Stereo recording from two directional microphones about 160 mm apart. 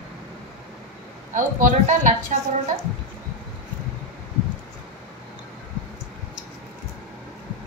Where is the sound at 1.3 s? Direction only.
50° right (ahead or behind).